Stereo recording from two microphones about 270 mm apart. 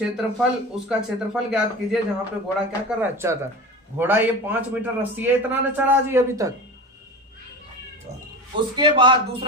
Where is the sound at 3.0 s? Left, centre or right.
Centre.